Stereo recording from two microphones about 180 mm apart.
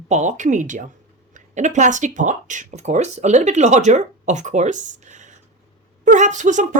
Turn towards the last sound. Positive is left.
turn(degrees=-45)  # may be behind; listen again after turning